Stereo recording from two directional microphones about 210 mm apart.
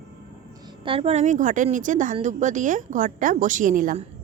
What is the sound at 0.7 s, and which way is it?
A woman's voice, 25° right (ahead or behind).